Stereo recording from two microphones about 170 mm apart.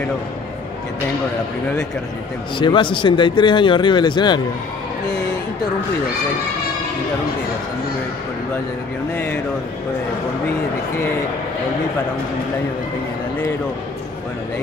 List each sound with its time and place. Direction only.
2.6 s speech: 30° left (ahead or behind)
9.1 s speech: 10° left (ahead or behind)